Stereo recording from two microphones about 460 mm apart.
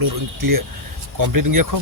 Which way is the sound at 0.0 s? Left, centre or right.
Right.